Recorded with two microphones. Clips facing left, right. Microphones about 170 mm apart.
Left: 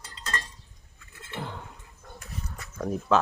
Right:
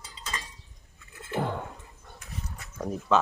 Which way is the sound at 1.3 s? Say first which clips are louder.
Right 7 dB; 50° right (ahead or behind).